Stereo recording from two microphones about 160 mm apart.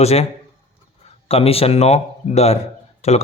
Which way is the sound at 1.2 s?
40° left (ahead or behind).